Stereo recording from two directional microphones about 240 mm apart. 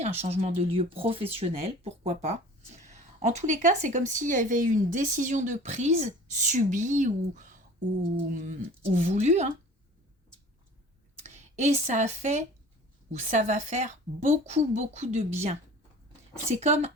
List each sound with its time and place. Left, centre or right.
0.2 s a woman's voice: right
11.2 s a woman's voice: right